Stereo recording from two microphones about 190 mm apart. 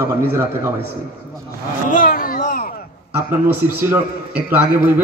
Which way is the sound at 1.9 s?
45° left (ahead or behind).